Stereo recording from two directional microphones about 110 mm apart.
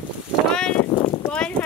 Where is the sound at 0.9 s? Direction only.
40° left (ahead or behind).